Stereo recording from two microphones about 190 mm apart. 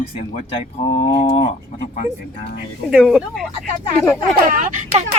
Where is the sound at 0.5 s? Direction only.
30° left (ahead or behind).